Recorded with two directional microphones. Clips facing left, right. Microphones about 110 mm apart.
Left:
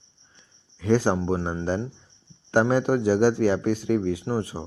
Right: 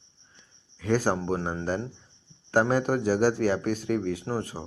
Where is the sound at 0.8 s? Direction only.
25° left (ahead or behind).